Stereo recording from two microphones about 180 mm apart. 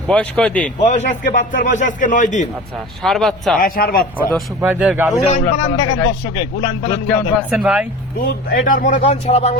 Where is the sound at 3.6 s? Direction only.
55° left (ahead or behind).